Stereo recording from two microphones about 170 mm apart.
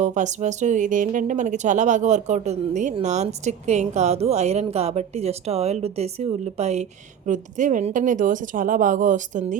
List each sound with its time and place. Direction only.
0.0 s speech: 45° right (ahead or behind)